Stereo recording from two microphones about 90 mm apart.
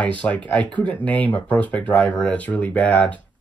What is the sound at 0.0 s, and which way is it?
Speech, 15° left (ahead or behind).